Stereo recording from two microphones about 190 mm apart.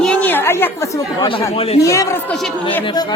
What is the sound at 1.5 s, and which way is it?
Speech, 30° left (ahead or behind).